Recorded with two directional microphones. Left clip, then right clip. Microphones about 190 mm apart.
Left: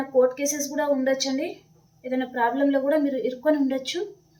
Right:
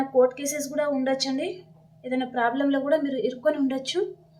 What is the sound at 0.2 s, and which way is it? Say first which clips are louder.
A woman's voice: left 1 dB; 20° right (ahead or behind).